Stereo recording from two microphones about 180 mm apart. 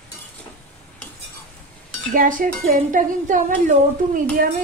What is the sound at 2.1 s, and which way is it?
Speech, 50° right (ahead or behind).